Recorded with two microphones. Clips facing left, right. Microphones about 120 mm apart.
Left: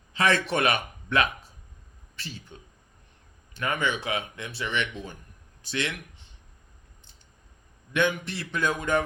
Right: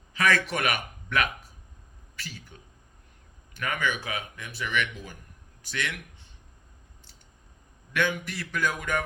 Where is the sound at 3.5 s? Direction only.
25° left (ahead or behind).